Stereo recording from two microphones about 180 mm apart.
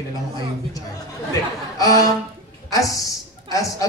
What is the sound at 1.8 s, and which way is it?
A man's voice, 20° left (ahead or behind).